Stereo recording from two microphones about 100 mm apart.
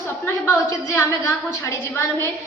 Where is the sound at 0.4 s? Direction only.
30° left (ahead or behind).